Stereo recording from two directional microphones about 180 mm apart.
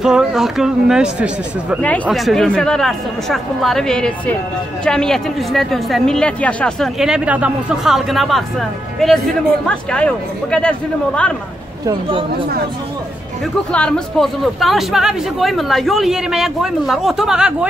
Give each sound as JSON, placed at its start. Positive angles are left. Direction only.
{"t": 0.0, "sound": "a woman's voice", "side_deg": -5}
{"t": 11.8, "sound": "speech", "side_deg": -30}
{"t": 13.7, "sound": "a woman's voice", "side_deg": 5}